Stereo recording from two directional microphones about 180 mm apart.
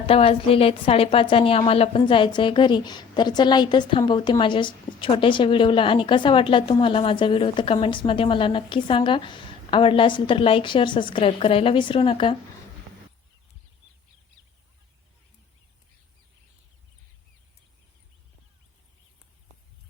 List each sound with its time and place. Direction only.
0.1 s a woman's voice: 30° left (ahead or behind)